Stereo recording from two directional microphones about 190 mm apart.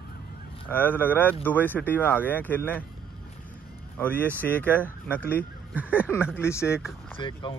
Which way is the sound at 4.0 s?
10° left (ahead or behind).